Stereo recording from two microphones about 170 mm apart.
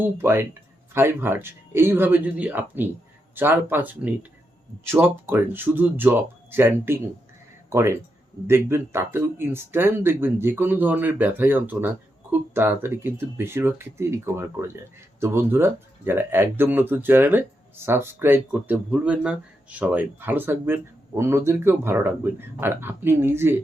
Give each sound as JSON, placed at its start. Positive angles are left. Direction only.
{"t": 0.0, "sound": "speech", "side_deg": -10}